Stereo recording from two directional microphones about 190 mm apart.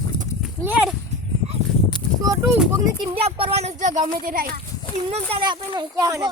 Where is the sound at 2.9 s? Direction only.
30° right (ahead or behind); by 4.5 s 50° right (ahead or behind).